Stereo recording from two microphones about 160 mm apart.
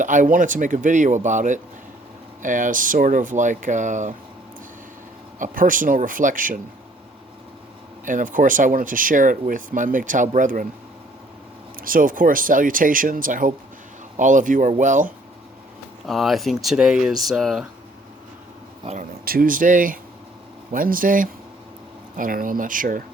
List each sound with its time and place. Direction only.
0.0 s speech: 55° right (ahead or behind)
5.4 s speech: 55° right (ahead or behind)
8.0 s speech: 55° right (ahead or behind)
11.8 s speech: 60° right (ahead or behind)
16.0 s speech: centre (ahead or behind)
19.2 s speech: 65° right (ahead or behind)